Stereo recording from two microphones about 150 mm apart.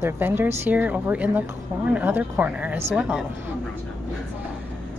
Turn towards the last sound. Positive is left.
turn(degrees=-10)  # may be behind; listen again after turning